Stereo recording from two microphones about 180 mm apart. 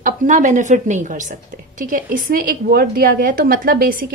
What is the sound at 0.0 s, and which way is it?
A woman's voice, 45° right (ahead or behind).